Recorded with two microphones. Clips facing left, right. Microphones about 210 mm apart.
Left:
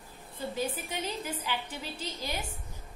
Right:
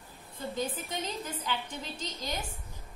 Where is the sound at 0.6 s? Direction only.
10° left (ahead or behind).